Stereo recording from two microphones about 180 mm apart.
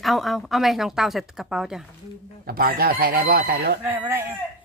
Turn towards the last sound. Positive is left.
turn(degrees=-15)  # may be behind; listen again after turning